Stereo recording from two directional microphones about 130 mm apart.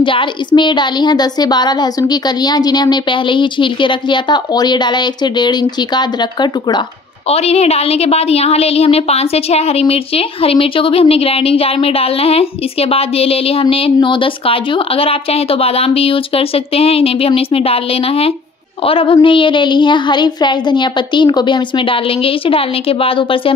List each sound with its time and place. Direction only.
0.0 s a woman's voice: 40° left (ahead or behind)
7.2 s a woman's voice: 55° left (ahead or behind)